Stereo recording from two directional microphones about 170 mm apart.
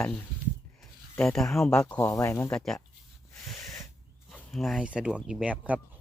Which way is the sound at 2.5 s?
5° left (ahead or behind).